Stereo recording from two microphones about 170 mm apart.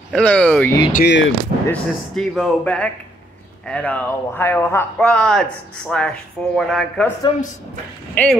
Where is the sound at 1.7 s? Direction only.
Centre (ahead or behind).